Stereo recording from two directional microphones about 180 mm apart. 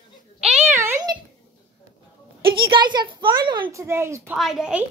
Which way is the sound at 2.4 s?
30° right (ahead or behind).